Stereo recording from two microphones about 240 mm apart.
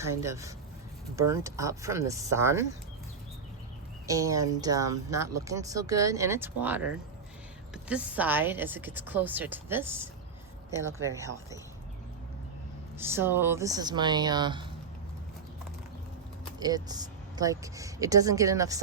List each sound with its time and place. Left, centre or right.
0.0 s speech: centre
4.0 s a woman's voice: centre
13.0 s speech: centre
16.6 s speech: centre